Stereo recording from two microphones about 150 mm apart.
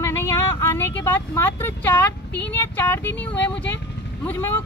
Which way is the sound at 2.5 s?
15° left (ahead or behind).